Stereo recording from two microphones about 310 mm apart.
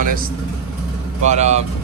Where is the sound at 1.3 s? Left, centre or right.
Right.